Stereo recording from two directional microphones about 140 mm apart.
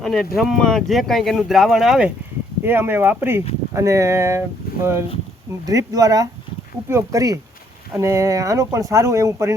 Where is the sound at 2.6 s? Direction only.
15° right (ahead or behind).